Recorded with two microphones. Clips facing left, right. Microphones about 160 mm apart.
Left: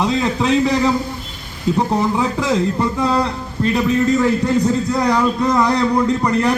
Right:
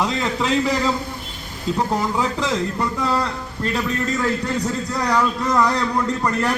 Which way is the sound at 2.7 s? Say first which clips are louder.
Left 4 dB; 20° left (ahead or behind).